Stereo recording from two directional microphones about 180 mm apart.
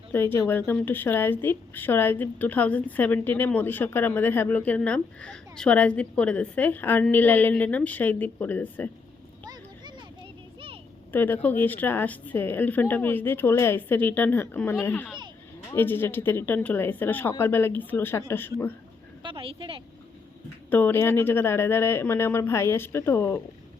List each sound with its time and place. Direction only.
0.1 s a woman's voice: 10° left (ahead or behind)
11.1 s a woman's voice: 10° left (ahead or behind)
19.2 s a woman's voice: 30° right (ahead or behind)
20.7 s a woman's voice: 10° left (ahead or behind)